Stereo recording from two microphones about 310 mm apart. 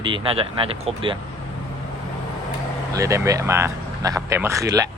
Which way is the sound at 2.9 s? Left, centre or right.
Centre.